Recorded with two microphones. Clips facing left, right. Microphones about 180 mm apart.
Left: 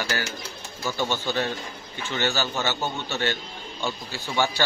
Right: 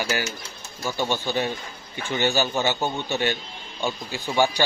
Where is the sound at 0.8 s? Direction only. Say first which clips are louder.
Right 1 dB; 15° right (ahead or behind).